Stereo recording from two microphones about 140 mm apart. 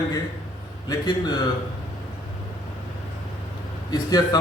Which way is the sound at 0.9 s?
30° left (ahead or behind).